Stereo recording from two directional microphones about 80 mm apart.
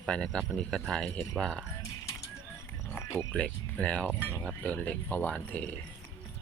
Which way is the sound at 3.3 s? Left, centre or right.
Centre.